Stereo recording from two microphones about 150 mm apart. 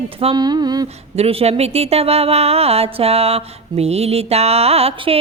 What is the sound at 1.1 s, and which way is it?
A woman's voice, 45° right (ahead or behind).